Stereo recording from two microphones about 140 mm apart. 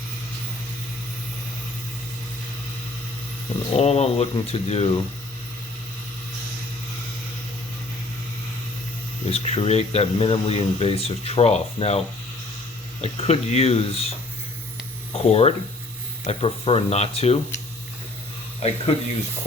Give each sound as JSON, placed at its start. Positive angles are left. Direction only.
{"t": 3.7, "sound": "speech", "side_deg": 50}
{"t": 9.2, "sound": "speech", "side_deg": 45}
{"t": 13.0, "sound": "speech", "side_deg": 45}
{"t": 15.1, "sound": "speech", "side_deg": 45}
{"t": 18.6, "sound": "speech", "side_deg": 55}